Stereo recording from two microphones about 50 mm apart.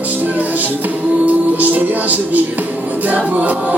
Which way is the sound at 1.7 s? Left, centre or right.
Right.